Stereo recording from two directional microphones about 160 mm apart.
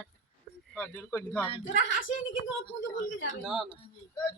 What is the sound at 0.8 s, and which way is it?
Speech, 10° left (ahead or behind).